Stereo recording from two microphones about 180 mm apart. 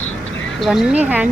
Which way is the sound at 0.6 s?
5° right (ahead or behind).